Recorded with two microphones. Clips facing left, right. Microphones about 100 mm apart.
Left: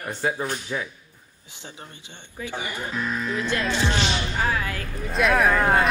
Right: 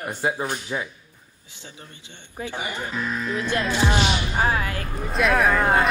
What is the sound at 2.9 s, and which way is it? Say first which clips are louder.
Speech: left 1 dB; centre (ahead or behind).